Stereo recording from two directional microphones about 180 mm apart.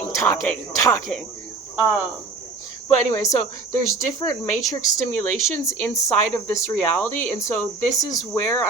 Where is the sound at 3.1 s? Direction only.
15° left (ahead or behind).